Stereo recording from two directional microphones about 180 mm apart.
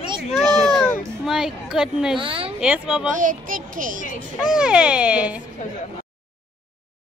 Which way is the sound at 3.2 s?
50° right (ahead or behind).